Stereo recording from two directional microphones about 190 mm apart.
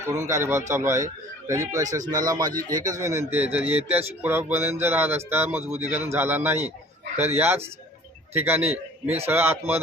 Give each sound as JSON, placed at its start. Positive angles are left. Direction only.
{"t": 0.0, "sound": "a man's voice", "side_deg": -15}